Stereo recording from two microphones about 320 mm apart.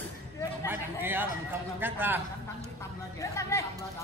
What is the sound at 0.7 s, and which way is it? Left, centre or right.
A man's voice, centre.